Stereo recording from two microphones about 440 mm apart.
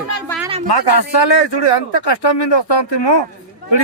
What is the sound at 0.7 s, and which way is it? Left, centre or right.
A man's voice, left.